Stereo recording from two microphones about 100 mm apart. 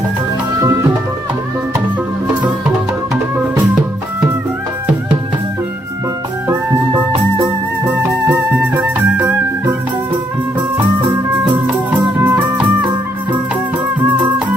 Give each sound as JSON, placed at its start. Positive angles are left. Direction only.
{"t": 8.3, "sound": "music", "side_deg": -20}
{"t": 11.6, "sound": "music", "side_deg": -15}
{"t": 14.0, "sound": "music", "side_deg": -15}